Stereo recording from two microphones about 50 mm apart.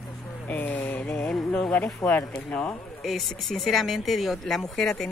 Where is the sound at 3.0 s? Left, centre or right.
Centre.